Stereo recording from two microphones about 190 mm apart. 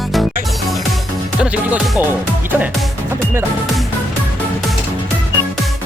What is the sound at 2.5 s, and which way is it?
Speech, 10° right (ahead or behind).